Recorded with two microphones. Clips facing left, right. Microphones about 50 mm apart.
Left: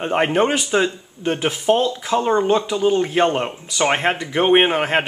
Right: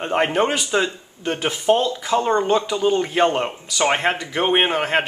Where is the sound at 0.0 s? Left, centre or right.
Centre.